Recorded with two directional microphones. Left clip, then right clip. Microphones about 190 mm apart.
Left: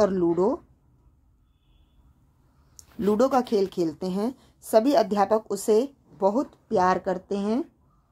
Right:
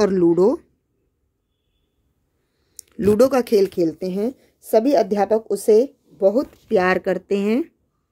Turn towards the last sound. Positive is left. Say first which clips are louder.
# right 7 dB
turn(degrees=-25)  # may be behind; listen again after turning